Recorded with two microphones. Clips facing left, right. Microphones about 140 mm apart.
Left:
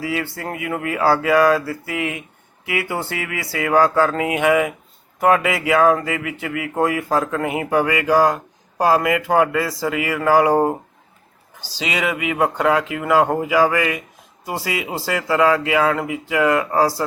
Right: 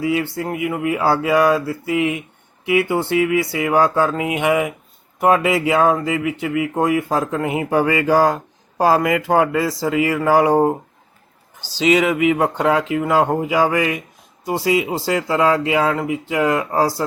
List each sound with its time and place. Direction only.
0.0 s speech: 25° right (ahead or behind)
11.8 s speech: 30° right (ahead or behind)